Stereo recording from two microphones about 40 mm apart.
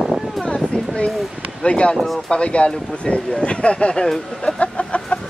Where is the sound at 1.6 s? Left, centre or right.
Left.